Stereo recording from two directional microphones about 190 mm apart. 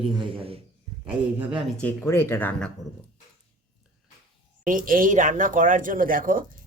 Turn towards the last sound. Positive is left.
turn(degrees=-45)  # may be behind; listen again after turning